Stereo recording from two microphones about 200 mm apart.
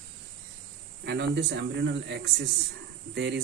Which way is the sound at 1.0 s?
60° right (ahead or behind).